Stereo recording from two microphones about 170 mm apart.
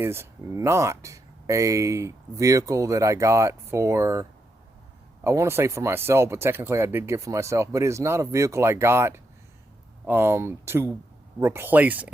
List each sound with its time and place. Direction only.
0.0 s speech: 15° right (ahead or behind)